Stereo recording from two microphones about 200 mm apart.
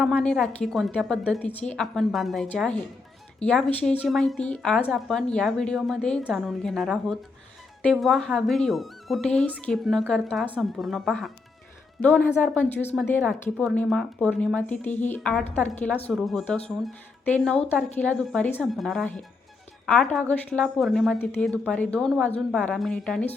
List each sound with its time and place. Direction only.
0.0 s a woman's voice: centre (ahead or behind)